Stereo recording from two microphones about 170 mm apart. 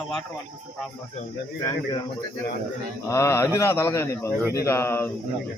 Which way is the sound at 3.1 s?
15° left (ahead or behind).